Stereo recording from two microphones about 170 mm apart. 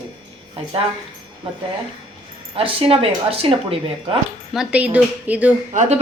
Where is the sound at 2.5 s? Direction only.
35° right (ahead or behind).